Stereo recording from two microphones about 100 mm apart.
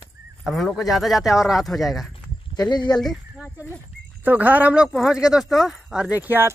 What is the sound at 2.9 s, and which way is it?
Speech, centre (ahead or behind).